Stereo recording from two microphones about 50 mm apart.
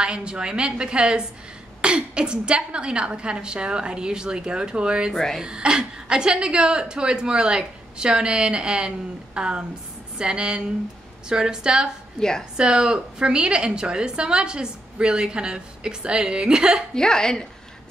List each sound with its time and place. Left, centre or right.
0.0 s a woman's voice: centre
12.2 s a woman's voice: centre
12.5 s a woman's voice: centre
16.9 s a woman's voice: centre